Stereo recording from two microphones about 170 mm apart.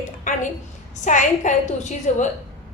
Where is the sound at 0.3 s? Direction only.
50° left (ahead or behind).